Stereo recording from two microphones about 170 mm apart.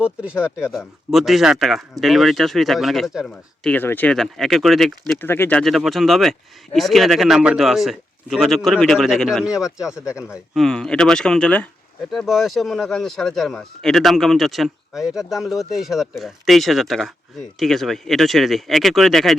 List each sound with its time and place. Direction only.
0.0 s speech: 5° right (ahead or behind)
5.1 s speech: 15° left (ahead or behind); by 9.7 s 5° right (ahead or behind)
9.7 s speech: 20° left (ahead or behind)
10.5 s speech: 5° left (ahead or behind)